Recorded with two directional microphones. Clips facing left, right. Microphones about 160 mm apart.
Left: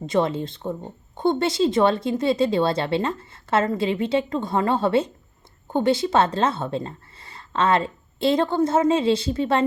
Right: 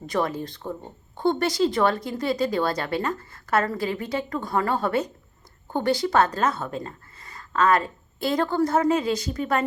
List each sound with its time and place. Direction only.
0.0 s speech: 25° left (ahead or behind)